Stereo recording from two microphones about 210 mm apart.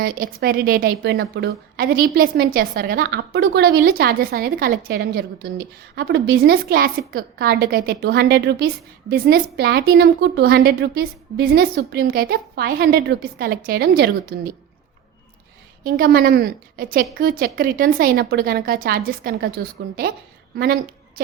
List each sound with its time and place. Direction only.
0.0 s a woman's voice: 45° right (ahead or behind)
15.8 s a woman's voice: 45° right (ahead or behind)